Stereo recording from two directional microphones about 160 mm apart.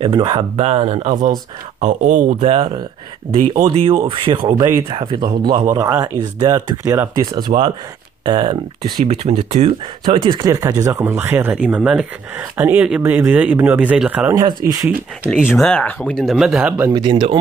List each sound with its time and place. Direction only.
0.0 s speech: 30° right (ahead or behind)
10.1 s speech: 35° right (ahead or behind)
10.4 s speech: 20° right (ahead or behind)
15.3 s speech: 5° left (ahead or behind)
16.9 s speech: 30° right (ahead or behind)